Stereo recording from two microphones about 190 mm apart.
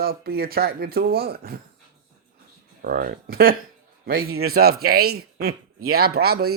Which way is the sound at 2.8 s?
50° right (ahead or behind).